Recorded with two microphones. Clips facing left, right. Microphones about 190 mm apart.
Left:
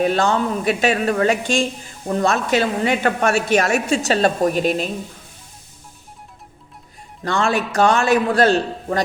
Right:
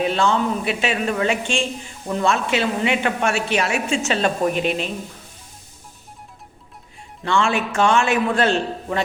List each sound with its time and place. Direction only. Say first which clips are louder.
0.0 s speech: left 2 dB; 40° left (ahead or behind)
7.3 s speech: even; 40° left (ahead or behind)